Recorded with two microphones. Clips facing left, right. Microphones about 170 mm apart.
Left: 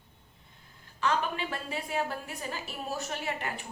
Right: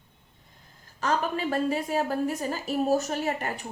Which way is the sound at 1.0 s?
40° right (ahead or behind).